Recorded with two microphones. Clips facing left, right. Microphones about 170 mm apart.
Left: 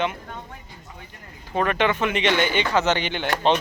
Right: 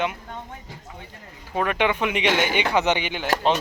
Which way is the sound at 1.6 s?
10° right (ahead or behind).